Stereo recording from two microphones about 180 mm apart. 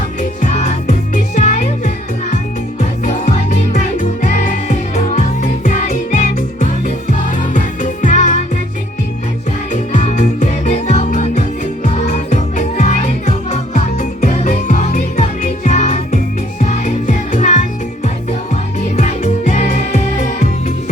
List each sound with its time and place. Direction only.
0.2 s music: 40° left (ahead or behind)
3.0 s music: 40° left (ahead or behind)
9.7 s music: 45° left (ahead or behind)
18.9 s music: 40° left (ahead or behind)